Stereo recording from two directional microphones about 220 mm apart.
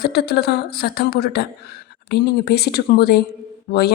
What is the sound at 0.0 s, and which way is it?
A woman's voice, 50° left (ahead or behind).